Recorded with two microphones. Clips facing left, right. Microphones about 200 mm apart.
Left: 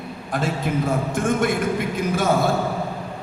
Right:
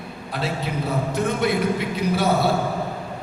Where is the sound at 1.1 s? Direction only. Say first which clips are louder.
Right 1 dB; 50° left (ahead or behind).